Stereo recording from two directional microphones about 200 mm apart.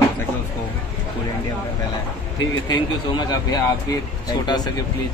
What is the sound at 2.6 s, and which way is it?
Speech, 20° left (ahead or behind).